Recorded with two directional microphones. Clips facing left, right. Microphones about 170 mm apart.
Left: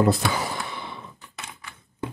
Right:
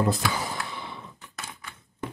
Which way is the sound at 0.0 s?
75° left (ahead or behind).